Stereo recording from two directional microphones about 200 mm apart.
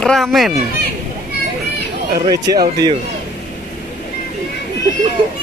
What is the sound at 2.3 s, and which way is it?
Speech, 20° right (ahead or behind).